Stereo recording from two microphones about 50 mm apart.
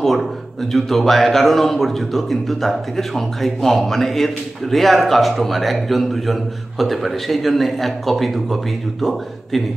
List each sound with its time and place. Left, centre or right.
0.0 s speech: centre